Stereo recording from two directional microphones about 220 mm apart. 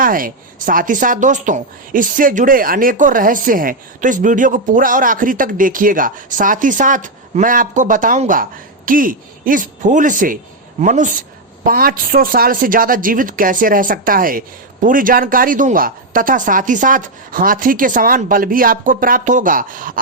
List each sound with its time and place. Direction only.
0.0 s speech: 40° right (ahead or behind)